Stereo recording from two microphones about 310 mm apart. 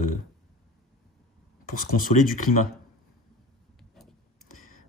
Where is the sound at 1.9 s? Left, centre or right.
Left.